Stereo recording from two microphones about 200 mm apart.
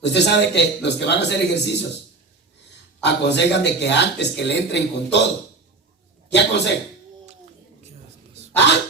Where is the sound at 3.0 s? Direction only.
60° left (ahead or behind).